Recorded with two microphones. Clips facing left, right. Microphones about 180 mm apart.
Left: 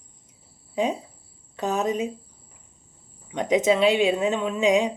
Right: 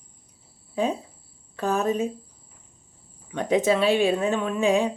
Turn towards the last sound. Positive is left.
turn(degrees=20)  # may be behind; listen again after turning